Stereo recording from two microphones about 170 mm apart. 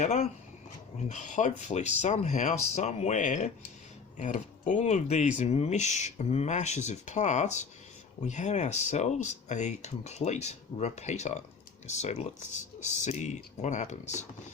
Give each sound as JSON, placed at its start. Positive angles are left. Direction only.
{"t": 0.0, "sound": "speech", "side_deg": 40}